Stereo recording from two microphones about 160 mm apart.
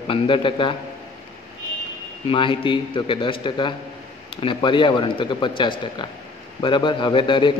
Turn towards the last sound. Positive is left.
turn(degrees=30)  # may be behind; listen again after turning